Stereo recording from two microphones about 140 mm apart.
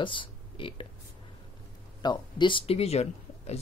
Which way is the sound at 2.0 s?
30° left (ahead or behind).